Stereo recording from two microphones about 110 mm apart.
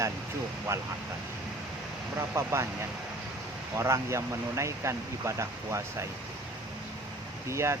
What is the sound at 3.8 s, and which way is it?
Speech, 25° right (ahead or behind).